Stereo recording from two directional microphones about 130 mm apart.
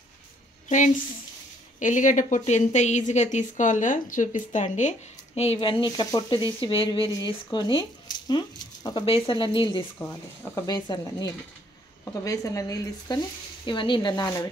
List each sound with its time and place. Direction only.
0.7 s a woman's voice: 70° left (ahead or behind)
1.8 s a woman's voice: 80° left; by 9.0 s 35° left (ahead or behind)
9.0 s speech: 45° left (ahead or behind)
9.9 s speech: 15° left (ahead or behind)
10.7 s speech: 30° left (ahead or behind)
13.7 s speech: 40° left (ahead or behind)